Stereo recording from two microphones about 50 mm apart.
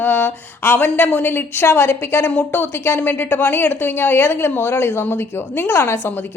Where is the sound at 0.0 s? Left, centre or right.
Left.